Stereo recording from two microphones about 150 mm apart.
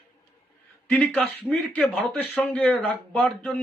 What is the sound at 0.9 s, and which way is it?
Speech, 5° left (ahead or behind).